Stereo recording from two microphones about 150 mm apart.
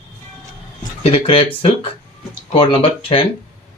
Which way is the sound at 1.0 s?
35° left (ahead or behind).